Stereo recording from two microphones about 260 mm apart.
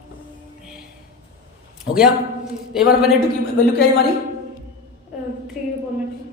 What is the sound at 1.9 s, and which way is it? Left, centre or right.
Speech, left.